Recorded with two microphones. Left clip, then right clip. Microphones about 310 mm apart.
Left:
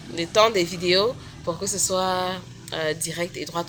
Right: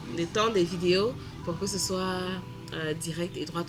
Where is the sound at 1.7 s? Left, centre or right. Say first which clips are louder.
Left 3 dB; centre.